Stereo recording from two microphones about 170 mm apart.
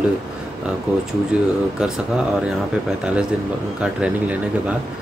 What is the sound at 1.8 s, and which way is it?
Speech, 5° right (ahead or behind).